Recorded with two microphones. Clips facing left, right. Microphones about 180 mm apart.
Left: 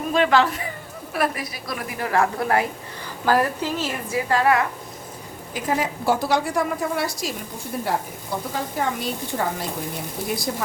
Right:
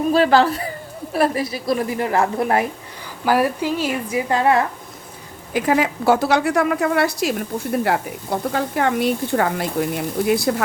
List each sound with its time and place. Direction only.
0.1 s a woman's voice: 35° right (ahead or behind)
5.5 s a woman's voice: 75° right (ahead or behind)